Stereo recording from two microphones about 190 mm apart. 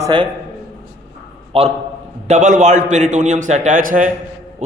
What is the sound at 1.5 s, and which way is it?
A man's voice, 30° right (ahead or behind).